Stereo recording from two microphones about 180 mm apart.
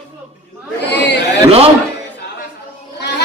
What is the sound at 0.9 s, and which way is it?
Chatter, 70° left (ahead or behind).